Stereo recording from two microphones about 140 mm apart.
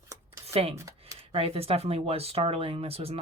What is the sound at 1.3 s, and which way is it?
Speech, 45° right (ahead or behind).